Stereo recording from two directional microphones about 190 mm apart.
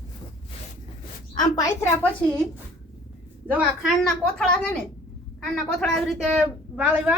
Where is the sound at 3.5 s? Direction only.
5° right (ahead or behind).